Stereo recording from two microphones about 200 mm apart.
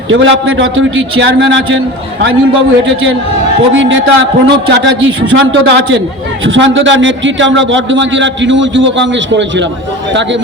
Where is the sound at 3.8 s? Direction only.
70° right (ahead or behind).